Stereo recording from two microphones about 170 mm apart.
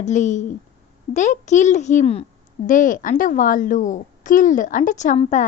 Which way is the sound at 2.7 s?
50° left (ahead or behind).